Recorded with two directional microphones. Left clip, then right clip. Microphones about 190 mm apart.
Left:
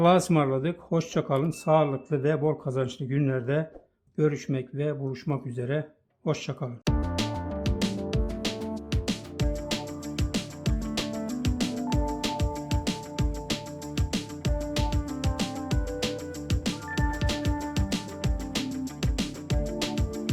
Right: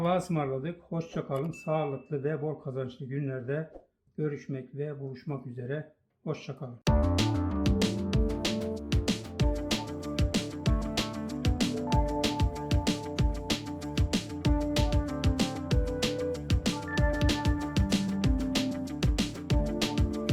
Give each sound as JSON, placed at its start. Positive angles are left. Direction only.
{"t": 0.0, "sound": "speech", "side_deg": 45}
{"t": 6.8, "sound": "music", "side_deg": 0}